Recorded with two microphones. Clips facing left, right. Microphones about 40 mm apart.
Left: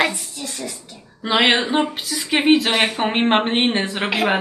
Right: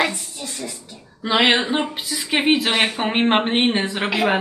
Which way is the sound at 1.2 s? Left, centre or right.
Centre.